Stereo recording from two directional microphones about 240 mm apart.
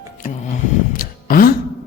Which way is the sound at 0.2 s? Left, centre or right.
Left.